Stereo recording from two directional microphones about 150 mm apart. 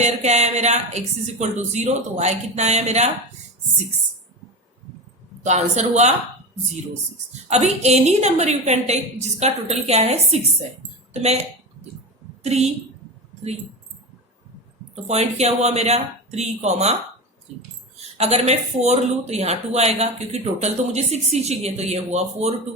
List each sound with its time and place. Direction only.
0.0 s a woman's voice: 50° right (ahead or behind)
5.4 s a woman's voice: 50° right (ahead or behind)
7.5 s a woman's voice: 50° right (ahead or behind)
12.4 s a woman's voice: 45° right (ahead or behind)
15.0 s a woman's voice: 45° right (ahead or behind)
18.2 s a woman's voice: 45° right (ahead or behind)